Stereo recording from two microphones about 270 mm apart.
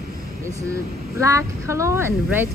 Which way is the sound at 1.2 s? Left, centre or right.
Centre.